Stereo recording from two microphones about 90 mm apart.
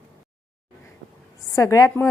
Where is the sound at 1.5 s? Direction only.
35° left (ahead or behind).